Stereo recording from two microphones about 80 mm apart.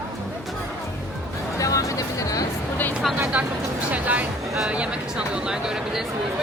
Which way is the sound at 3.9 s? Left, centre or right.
Centre.